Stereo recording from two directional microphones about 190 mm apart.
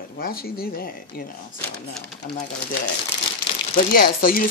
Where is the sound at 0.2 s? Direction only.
50° left (ahead or behind).